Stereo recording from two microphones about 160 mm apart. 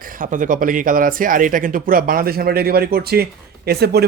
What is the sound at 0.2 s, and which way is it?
Speech, 55° right (ahead or behind).